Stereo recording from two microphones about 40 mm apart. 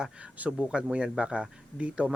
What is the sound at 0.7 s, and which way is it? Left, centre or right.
Speech, right.